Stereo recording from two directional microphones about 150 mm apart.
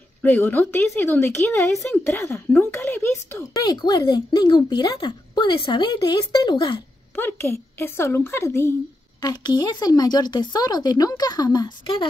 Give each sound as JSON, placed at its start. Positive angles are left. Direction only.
{"t": 0.2, "sound": "speech", "side_deg": 10}
{"t": 3.6, "sound": "speech", "side_deg": 30}
{"t": 7.2, "sound": "speech", "side_deg": 15}
{"t": 9.2, "sound": "speech", "side_deg": 30}